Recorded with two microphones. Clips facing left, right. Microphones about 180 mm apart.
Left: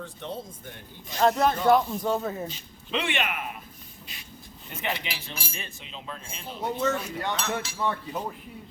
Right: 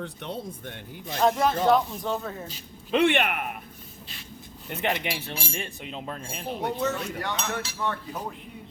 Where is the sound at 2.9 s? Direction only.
55° right (ahead or behind).